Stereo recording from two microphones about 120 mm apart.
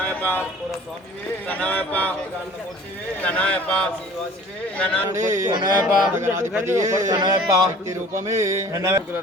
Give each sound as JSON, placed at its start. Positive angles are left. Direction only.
{"t": 0.0, "sound": "a sound", "side_deg": 15}
{"t": 1.5, "sound": "speech", "side_deg": 10}
{"t": 3.2, "sound": "speech", "side_deg": 10}
{"t": 5.1, "sound": "a man's voice", "side_deg": -25}
{"t": 6.1, "sound": "a man's voice", "side_deg": -20}